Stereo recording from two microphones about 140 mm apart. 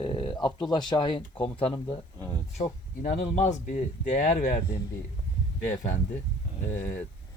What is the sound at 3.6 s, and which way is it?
Speech, 70° left (ahead or behind).